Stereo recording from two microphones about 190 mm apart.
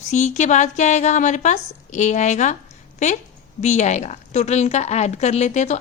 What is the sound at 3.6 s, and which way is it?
A woman's voice, 35° left (ahead or behind).